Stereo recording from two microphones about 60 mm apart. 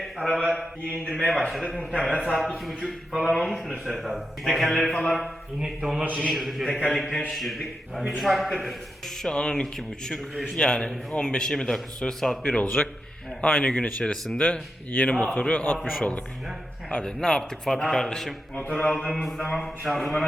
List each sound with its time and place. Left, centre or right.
0.2 s a man's voice: centre
1.5 s a man's voice: centre
5.5 s a man's voice: centre
9.2 s a man's voice: centre
15.8 s a man's voice: centre
16.9 s a man's voice: centre
18.5 s speech: left
18.8 s a man's voice: centre
19.0 s a man's voice: centre